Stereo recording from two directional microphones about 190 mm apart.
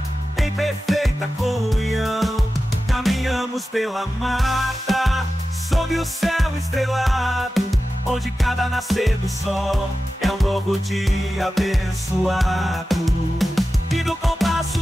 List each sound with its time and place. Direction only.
0.4 s music: centre (ahead or behind)